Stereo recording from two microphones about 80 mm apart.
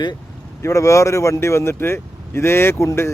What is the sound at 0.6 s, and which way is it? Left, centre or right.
Speech, left.